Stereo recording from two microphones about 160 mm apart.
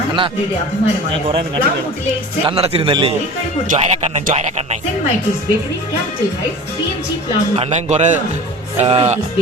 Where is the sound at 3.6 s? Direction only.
50° right (ahead or behind).